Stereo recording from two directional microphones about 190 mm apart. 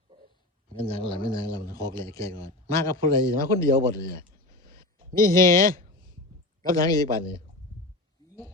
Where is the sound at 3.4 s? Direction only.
50° right (ahead or behind).